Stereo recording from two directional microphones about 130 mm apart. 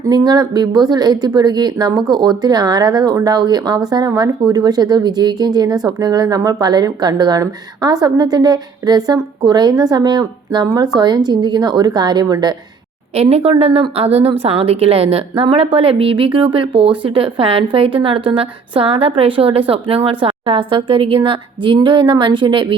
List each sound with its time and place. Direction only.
0.0 s speech: 30° right (ahead or behind)
13.1 s a woman's voice: 50° right (ahead or behind)